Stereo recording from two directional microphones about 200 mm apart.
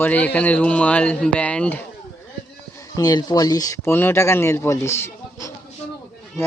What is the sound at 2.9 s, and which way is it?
Speech, 20° left (ahead or behind).